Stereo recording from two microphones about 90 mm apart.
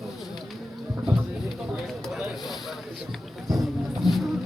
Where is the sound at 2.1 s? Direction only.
Centre (ahead or behind).